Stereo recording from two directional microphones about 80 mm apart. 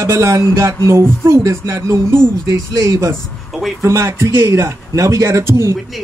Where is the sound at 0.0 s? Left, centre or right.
Right.